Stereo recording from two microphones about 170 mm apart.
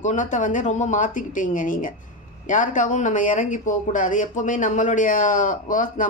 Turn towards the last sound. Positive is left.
turn(degrees=50)  # may be behind; listen again after turning